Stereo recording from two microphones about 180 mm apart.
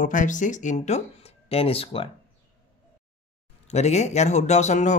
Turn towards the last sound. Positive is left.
turn(degrees=40)  # may be behind; listen again after turning